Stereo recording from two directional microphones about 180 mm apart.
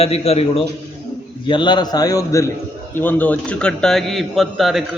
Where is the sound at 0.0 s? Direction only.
35° left (ahead or behind).